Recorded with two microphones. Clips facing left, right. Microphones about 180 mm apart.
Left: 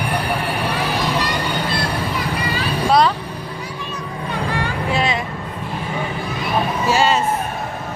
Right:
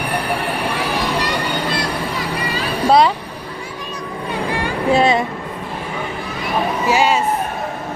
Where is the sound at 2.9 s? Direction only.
20° right (ahead or behind).